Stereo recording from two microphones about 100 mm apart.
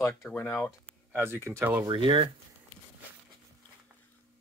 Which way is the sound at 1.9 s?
60° right (ahead or behind).